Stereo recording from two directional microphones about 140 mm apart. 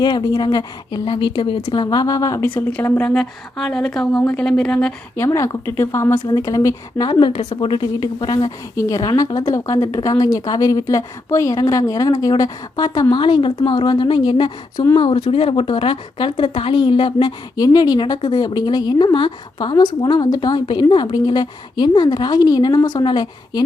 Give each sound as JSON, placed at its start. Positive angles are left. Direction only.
{"t": 0.0, "sound": "speech", "side_deg": 30}
{"t": 2.6, "sound": "a woman's voice", "side_deg": 10}
{"t": 5.1, "sound": "speech", "side_deg": 20}
{"t": 6.1, "sound": "speech", "side_deg": 30}